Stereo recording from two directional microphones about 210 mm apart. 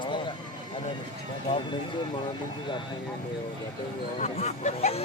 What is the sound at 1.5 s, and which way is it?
Speech, 25° left (ahead or behind).